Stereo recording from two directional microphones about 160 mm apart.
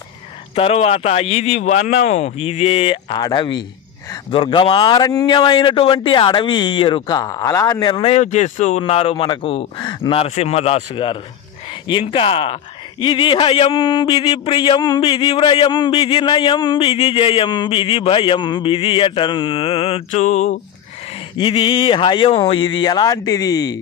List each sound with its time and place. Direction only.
0.6 s a man's voice: 40° left (ahead or behind); by 7.8 s 20° left (ahead or behind)
7.8 s speech: 35° left (ahead or behind)
20.1 s a sound: 45° left (ahead or behind)
21.4 s a man's voice: 30° left (ahead or behind)